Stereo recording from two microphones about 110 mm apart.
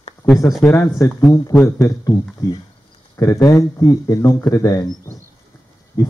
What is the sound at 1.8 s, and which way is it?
Speech, 35° left (ahead or behind).